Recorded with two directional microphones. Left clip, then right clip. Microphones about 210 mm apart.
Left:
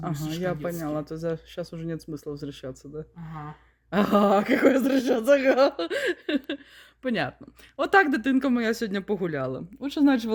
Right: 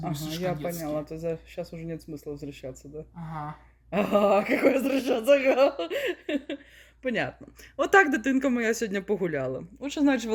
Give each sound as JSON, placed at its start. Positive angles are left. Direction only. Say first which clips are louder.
{"t": 0.1, "sound": "speech", "louder": "left 1 dB", "side_deg": 30}
{"t": 0.6, "sound": "speech", "louder": "left 1 dB", "side_deg": 40}
{"t": 3.9, "sound": "speech", "louder": "left 1 dB", "side_deg": 45}
{"t": 7.0, "sound": "speech", "louder": "left 1 dB", "side_deg": 30}
{"t": 7.8, "sound": "speech", "louder": "even", "side_deg": 15}